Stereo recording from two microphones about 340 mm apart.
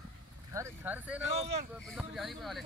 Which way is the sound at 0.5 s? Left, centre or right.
Centre.